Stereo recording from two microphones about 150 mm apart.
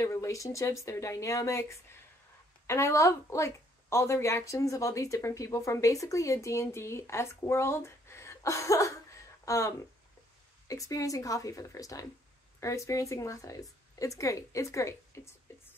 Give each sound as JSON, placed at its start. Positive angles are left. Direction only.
{"t": 0.0, "sound": "speech", "side_deg": 20}